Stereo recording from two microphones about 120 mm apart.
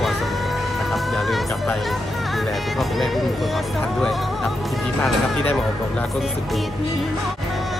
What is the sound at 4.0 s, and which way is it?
Music, centre (ahead or behind).